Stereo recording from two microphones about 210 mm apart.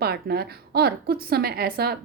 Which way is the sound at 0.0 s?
50° right (ahead or behind).